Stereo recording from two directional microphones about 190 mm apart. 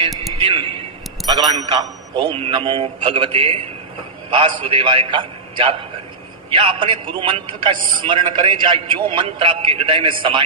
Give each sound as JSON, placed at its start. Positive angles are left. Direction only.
{"t": 1.3, "sound": "a man's voice", "side_deg": -20}